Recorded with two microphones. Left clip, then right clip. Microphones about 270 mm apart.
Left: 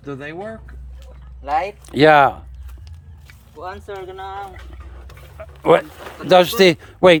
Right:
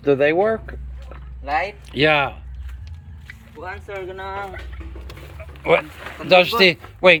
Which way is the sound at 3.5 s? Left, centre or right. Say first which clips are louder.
Left 1 dB; left.